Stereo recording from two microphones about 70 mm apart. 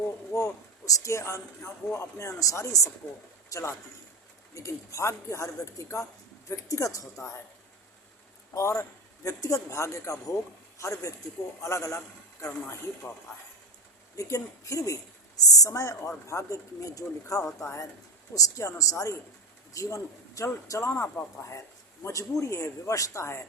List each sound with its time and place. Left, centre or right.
0.3 s a man's voice: left
3.5 s a man's voice: left
8.5 s a man's voice: left
14.2 s a man's voice: left